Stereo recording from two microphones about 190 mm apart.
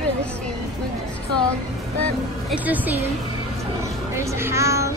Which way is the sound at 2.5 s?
10° right (ahead or behind).